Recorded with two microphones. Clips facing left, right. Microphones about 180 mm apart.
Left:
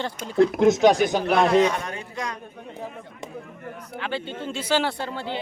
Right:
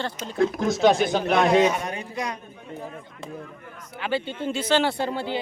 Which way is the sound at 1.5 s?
10° right (ahead or behind).